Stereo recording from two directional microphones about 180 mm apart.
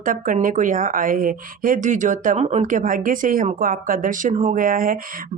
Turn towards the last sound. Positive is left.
turn(degrees=-50)  # may be behind; listen again after turning